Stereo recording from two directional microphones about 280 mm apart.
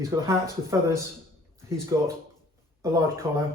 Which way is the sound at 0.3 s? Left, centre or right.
Centre.